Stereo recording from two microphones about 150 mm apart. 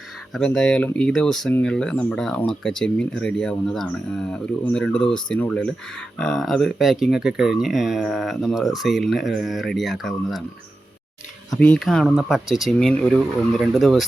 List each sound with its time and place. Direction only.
0.3 s speech: 5° left (ahead or behind)
11.5 s speech: 5° left (ahead or behind)